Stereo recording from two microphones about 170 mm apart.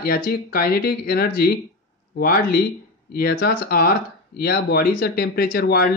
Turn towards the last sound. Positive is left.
turn(degrees=65)  # may be behind; listen again after turning